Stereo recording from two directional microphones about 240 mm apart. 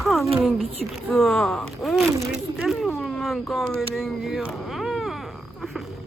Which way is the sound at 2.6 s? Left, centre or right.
Centre.